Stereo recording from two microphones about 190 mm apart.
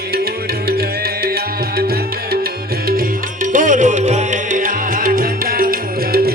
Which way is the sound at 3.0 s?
45° right (ahead or behind).